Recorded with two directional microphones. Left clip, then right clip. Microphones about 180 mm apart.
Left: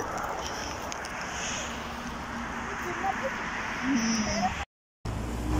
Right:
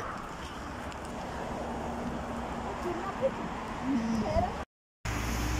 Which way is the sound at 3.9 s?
25° right (ahead or behind).